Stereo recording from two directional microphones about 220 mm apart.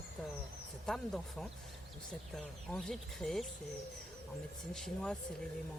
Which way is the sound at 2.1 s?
5° left (ahead or behind).